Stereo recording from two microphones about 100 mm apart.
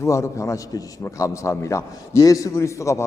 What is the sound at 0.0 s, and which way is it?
A man's voice, 30° left (ahead or behind).